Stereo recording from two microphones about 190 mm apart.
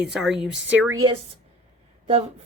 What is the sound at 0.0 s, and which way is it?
Speech, 5° right (ahead or behind).